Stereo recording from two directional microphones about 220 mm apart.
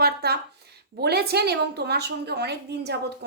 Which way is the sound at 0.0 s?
45° right (ahead or behind).